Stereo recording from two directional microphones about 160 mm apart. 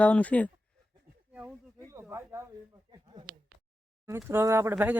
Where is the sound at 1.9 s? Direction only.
20° right (ahead or behind).